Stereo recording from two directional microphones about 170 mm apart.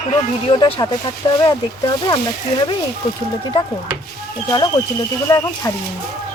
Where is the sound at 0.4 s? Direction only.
25° left (ahead or behind).